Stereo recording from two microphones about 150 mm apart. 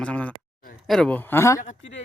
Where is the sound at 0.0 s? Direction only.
10° left (ahead or behind).